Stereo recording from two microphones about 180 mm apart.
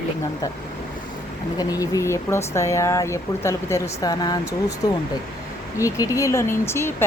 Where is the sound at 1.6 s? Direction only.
20° left (ahead or behind).